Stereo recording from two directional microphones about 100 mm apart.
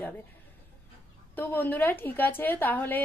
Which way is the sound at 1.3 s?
20° left (ahead or behind).